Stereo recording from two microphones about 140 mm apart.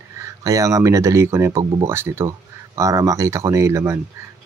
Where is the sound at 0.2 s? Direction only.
25° right (ahead or behind).